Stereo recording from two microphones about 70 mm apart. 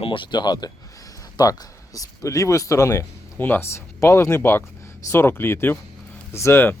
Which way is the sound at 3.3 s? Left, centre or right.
Left.